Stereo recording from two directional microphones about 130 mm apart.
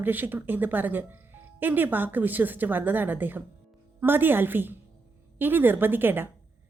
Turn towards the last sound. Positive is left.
turn(degrees=-15)  # may be behind; listen again after turning